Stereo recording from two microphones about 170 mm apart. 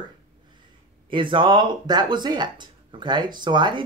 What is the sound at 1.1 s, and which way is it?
Speech, 30° right (ahead or behind).